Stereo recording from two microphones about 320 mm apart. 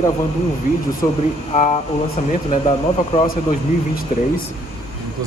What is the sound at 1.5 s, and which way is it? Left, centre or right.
Speech, left.